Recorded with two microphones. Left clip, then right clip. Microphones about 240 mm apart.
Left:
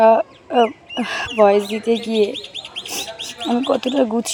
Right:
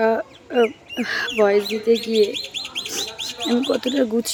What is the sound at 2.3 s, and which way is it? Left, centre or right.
Bird, right.